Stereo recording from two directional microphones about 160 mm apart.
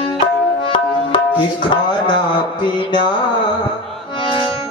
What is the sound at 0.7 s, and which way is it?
Tabla, 30° left (ahead or behind).